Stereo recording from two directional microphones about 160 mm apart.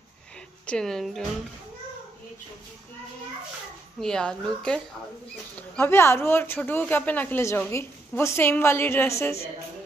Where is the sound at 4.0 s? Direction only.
5° left (ahead or behind).